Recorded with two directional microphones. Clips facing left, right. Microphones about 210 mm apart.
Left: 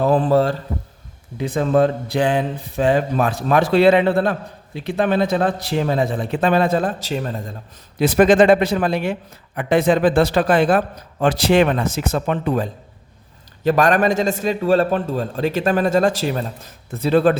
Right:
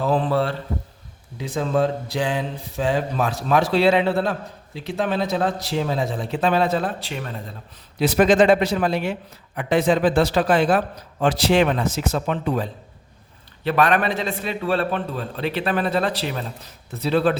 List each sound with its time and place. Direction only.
0.0 s a man's voice: 50° left (ahead or behind)
1.4 s speech: 60° left (ahead or behind); by 7.5 s 40° left (ahead or behind)
7.9 s a man's voice: 50° left (ahead or behind)